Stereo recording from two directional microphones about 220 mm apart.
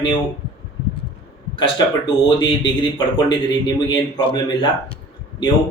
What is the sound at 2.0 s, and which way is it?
Speech, 20° left (ahead or behind).